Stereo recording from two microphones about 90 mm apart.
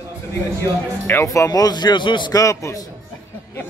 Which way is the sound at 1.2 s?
35° left (ahead or behind).